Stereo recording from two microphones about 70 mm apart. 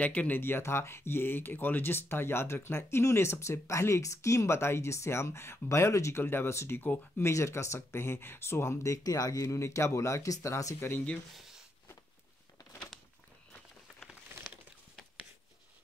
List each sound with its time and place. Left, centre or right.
0.0 s speech: left
0.4 s speech: left
8.9 s speech: left
11.3 s a sound: centre